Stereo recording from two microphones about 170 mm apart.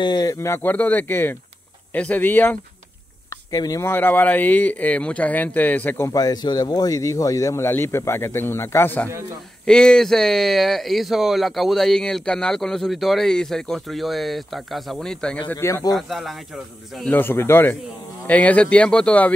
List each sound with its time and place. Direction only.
0.0 s speech: 25° left (ahead or behind)
3.5 s speech: 20° left (ahead or behind); by 15.3 s 5° left (ahead or behind)
15.4 s speech: 15° left (ahead or behind)
15.9 s speech: centre (ahead or behind)
17.1 s speech: 10° left (ahead or behind)